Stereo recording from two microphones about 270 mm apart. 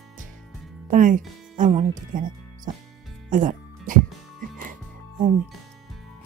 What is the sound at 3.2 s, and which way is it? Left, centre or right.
Music, right.